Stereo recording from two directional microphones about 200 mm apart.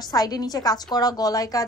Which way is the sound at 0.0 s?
20° left (ahead or behind).